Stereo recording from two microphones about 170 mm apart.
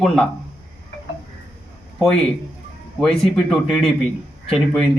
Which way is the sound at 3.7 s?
Centre (ahead or behind).